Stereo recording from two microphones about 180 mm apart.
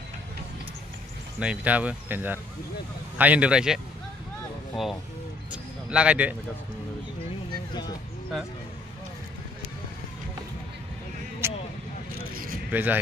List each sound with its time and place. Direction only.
1.4 s speech: 5° right (ahead or behind)
7.5 s a sound: 25° left (ahead or behind)
11.4 s vehicle: 15° right (ahead or behind)
12.7 s speech: 10° right (ahead or behind)